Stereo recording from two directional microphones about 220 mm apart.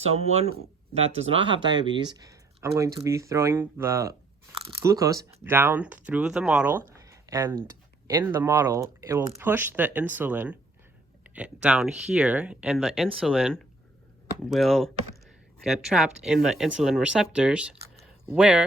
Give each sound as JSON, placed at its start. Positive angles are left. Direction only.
{"t": 0.0, "sound": "speech", "side_deg": -30}